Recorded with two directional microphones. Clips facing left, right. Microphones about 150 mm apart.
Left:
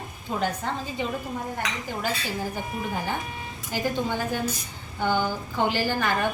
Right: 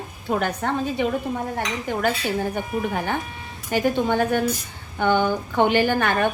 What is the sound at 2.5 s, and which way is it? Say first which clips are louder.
Speech: right 5 dB; 65° right (ahead or behind).